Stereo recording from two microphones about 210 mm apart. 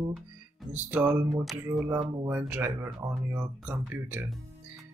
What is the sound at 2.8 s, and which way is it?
Speech, 20° right (ahead or behind).